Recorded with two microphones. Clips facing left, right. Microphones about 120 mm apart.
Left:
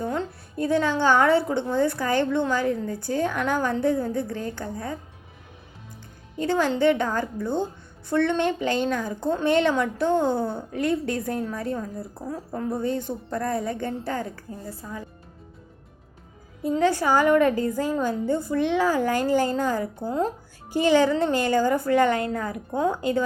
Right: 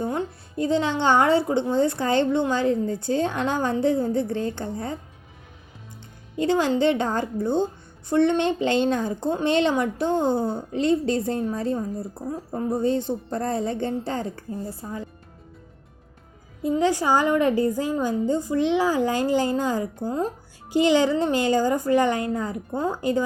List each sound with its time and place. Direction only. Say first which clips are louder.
0.0 s a woman's voice: right 1 dB; 20° right (ahead or behind)
6.3 s a woman's voice: right 2 dB; 20° right (ahead or behind)
16.7 s a woman's voice: even; 15° right (ahead or behind)